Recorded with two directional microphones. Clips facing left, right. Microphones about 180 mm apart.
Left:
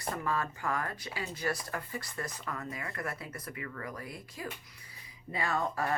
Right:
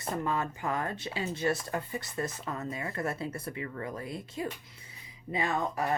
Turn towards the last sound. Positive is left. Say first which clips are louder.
# right 2 dB
turn(degrees=-20)  # may be behind; listen again after turning